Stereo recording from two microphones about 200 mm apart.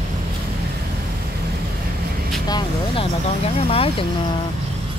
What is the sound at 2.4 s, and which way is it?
Speech, 25° left (ahead or behind).